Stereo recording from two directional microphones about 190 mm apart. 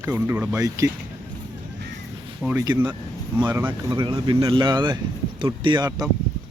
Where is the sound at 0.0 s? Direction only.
10° right (ahead or behind).